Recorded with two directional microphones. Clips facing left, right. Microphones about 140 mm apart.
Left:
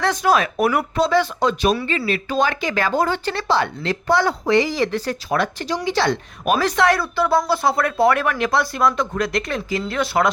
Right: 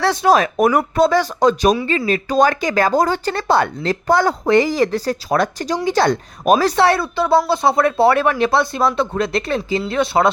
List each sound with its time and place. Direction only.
0.0 s a woman's voice: 30° right (ahead or behind)